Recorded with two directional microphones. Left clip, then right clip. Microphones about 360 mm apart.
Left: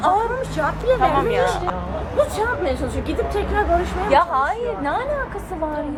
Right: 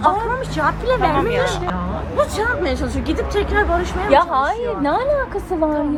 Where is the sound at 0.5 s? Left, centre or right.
Right.